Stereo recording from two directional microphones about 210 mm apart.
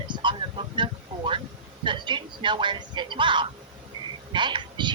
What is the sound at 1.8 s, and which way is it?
A woman's voice, 20° right (ahead or behind).